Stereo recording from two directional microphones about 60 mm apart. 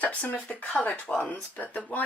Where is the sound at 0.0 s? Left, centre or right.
Left.